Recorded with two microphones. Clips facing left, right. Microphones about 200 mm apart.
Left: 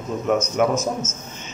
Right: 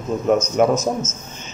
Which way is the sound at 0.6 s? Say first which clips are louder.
Right 4 dB; 35° right (ahead or behind).